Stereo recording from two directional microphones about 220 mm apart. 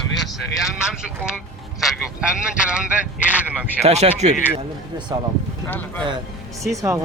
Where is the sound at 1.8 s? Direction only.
Centre (ahead or behind).